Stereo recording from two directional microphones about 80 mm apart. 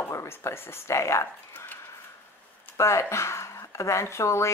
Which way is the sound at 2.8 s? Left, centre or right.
Left.